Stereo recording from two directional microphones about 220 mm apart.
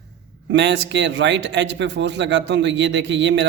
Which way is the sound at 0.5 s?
55° right (ahead or behind).